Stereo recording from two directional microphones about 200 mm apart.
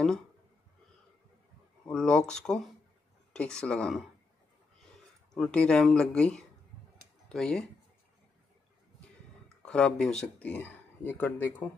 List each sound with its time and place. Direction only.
1.9 s speech: 5° left (ahead or behind)
5.3 s speech: 5° left (ahead or behind)
9.7 s speech: 5° left (ahead or behind)